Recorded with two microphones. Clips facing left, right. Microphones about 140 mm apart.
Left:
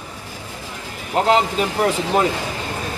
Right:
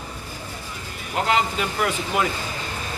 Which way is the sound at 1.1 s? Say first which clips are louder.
Left 5 dB; 35° left (ahead or behind).